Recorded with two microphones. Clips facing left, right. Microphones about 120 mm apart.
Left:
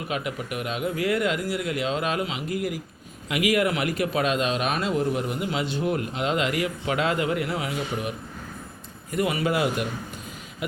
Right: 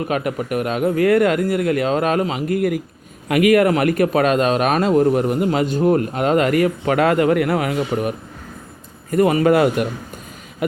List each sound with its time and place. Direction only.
0.1 s a man's voice: 50° right (ahead or behind)
9.0 s a man's voice: 45° right (ahead or behind)
10.6 s a sound: 50° right (ahead or behind)